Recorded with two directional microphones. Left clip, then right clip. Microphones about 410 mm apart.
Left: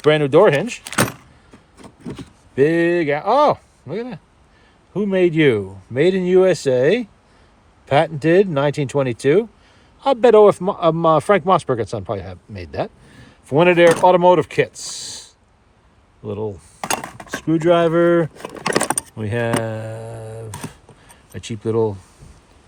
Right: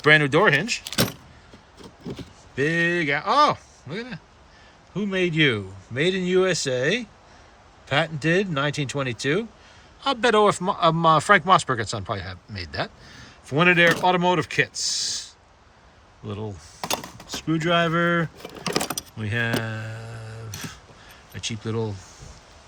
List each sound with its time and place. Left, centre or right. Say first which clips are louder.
0.0 s speech: left 4 dB; centre
1.8 s a sound: left 3 dB; left
2.6 s speech: left 6 dB; centre